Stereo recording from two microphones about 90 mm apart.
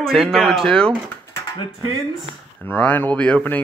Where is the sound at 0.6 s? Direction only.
10° left (ahead or behind).